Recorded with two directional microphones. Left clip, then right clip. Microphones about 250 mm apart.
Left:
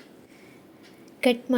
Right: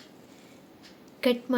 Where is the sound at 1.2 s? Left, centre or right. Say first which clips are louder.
Left 3 dB; centre.